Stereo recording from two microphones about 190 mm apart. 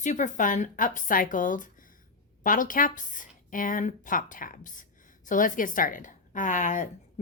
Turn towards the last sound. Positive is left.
turn(degrees=40)  # may be behind; listen again after turning